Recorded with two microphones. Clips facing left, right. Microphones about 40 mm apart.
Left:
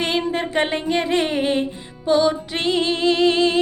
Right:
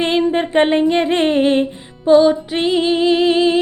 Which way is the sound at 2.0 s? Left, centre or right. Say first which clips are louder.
Right 7 dB; centre.